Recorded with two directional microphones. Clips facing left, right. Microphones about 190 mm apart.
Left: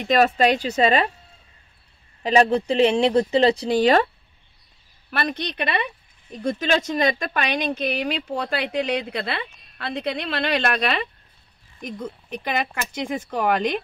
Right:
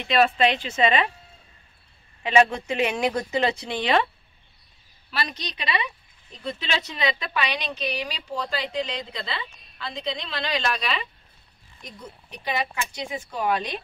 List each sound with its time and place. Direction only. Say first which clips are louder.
0.0 s speech: left 3 dB; 40° left (ahead or behind)
2.2 s speech: left 3 dB; 35° left (ahead or behind)
5.1 s speech: left 5 dB; 55° left (ahead or behind)